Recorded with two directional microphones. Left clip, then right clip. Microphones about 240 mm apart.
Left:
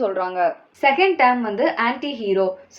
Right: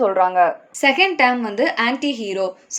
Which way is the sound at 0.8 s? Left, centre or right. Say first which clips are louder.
Even; right.